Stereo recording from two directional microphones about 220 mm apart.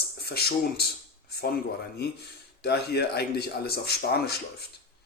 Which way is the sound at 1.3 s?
45° left (ahead or behind).